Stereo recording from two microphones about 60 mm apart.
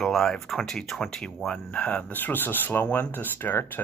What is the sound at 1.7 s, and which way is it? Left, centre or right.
Speech, left.